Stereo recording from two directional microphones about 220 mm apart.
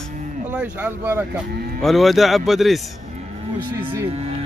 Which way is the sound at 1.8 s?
Centre (ahead or behind).